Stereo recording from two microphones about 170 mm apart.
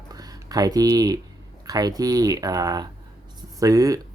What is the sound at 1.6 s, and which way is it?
Speech, 20° right (ahead or behind).